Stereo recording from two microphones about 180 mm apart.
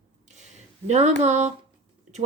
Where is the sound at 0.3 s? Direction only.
40° right (ahead or behind).